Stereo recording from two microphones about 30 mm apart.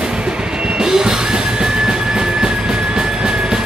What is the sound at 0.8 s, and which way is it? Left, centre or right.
Music, right.